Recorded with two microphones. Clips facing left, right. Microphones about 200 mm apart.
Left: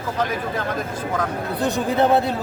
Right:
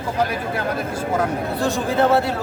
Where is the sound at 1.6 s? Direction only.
20° left (ahead or behind).